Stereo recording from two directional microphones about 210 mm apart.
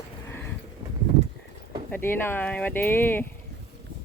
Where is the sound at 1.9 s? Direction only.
10° left (ahead or behind).